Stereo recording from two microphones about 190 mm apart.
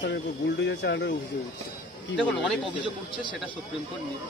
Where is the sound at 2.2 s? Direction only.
5° left (ahead or behind).